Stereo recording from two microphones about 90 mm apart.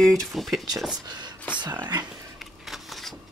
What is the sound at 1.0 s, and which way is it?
Speech, 50° right (ahead or behind).